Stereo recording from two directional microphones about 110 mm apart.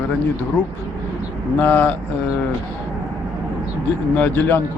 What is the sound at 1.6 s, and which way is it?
Speech, 15° left (ahead or behind).